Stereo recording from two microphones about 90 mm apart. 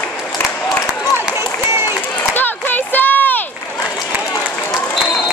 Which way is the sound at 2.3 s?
20° left (ahead or behind).